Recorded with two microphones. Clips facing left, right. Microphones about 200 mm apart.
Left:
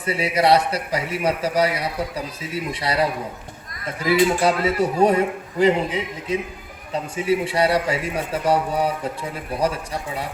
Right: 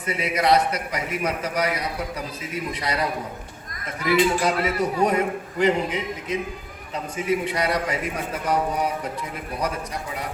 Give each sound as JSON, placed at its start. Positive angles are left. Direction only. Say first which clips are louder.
{"t": 0.0, "sound": "a man's voice", "louder": "left 3 dB", "side_deg": 30}